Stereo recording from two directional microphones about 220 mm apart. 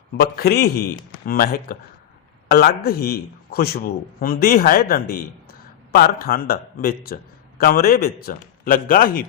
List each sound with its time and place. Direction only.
0.2 s a man's voice: 45° left (ahead or behind)